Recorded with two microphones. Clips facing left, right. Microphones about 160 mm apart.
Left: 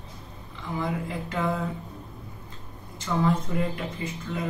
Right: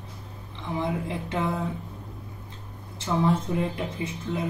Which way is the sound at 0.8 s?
25° right (ahead or behind).